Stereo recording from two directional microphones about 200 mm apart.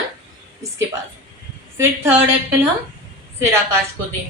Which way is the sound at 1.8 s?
10° right (ahead or behind).